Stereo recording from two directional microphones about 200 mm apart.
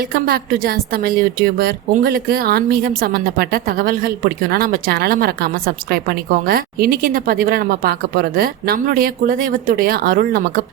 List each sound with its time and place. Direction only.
0.1 s a woman's voice: 50° right (ahead or behind)